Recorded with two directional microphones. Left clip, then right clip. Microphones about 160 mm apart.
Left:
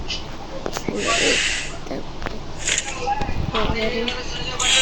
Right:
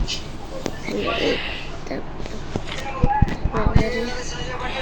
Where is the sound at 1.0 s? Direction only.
55° left (ahead or behind).